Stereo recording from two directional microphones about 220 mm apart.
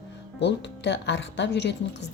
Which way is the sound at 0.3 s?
55° left (ahead or behind).